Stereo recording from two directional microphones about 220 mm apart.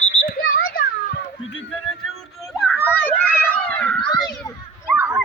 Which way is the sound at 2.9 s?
5° left (ahead or behind).